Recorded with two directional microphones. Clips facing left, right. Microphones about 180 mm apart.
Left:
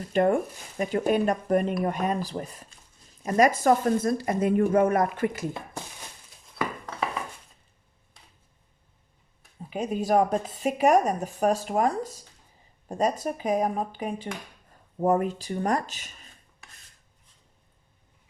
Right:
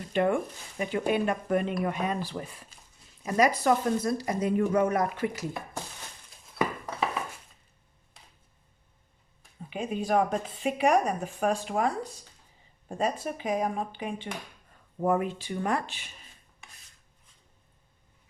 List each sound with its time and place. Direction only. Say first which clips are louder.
0.1 s speech: left 3 dB; 45° left (ahead or behind)
6.6 s a sound: right 2 dB; 20° right (ahead or behind)
9.6 s speech: left 3 dB; 40° left (ahead or behind)